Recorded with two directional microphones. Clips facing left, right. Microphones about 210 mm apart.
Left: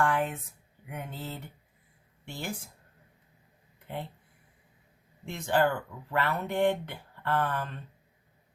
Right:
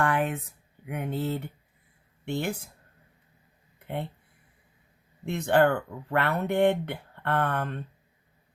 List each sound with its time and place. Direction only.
0.0 s a sound: 65° right (ahead or behind)
0.9 s speech: 65° right (ahead or behind)
3.8 s speech: 60° right (ahead or behind)
5.2 s speech: 60° right (ahead or behind)